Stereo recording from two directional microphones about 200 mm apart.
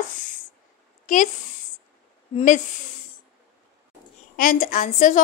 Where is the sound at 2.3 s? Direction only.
40° left (ahead or behind).